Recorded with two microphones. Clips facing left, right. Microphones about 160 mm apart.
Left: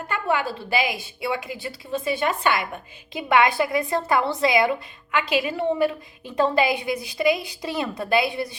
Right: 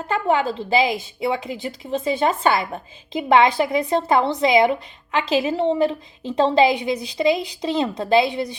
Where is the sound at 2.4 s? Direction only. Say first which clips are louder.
Right 4 dB; 35° right (ahead or behind).